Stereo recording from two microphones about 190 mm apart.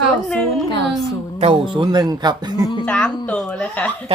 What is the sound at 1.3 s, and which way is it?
Speech, 30° right (ahead or behind).